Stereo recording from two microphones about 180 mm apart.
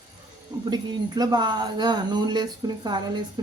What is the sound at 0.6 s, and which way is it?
Speech, 25° right (ahead or behind).